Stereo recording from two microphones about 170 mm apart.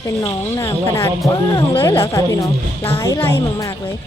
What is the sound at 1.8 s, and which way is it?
Music, 15° left (ahead or behind).